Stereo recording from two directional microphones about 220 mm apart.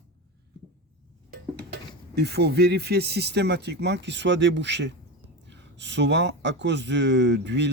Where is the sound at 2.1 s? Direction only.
50° right (ahead or behind).